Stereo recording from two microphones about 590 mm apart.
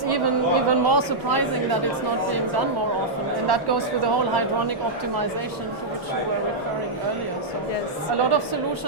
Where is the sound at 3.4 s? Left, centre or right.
Right.